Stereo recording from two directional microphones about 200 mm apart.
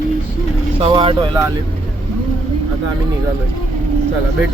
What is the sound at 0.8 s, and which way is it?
Speech, 30° right (ahead or behind).